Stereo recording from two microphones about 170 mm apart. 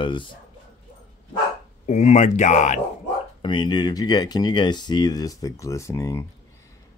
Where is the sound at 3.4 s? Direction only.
25° left (ahead or behind).